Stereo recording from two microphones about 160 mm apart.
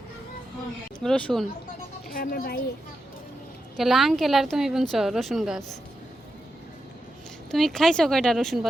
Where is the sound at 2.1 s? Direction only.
65° left (ahead or behind).